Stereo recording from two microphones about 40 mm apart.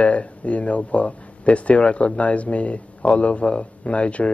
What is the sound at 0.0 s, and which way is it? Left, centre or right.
Speech, left.